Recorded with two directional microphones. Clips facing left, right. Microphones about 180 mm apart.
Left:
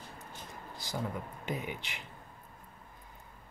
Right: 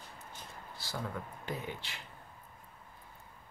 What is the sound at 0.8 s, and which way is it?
Speech, 15° left (ahead or behind).